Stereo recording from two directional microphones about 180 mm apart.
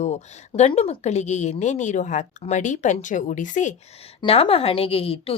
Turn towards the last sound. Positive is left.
turn(degrees=30)  # may be behind; listen again after turning